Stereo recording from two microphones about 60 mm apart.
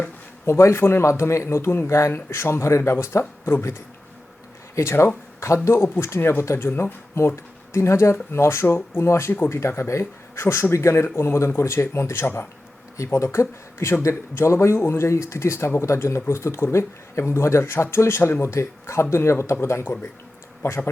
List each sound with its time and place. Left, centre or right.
0.4 s speech: left
13.1 s speech: left